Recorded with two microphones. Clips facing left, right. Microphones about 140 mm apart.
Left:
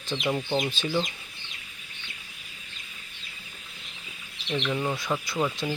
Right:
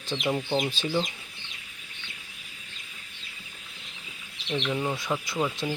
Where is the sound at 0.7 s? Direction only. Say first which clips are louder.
Even; 35° right (ahead or behind).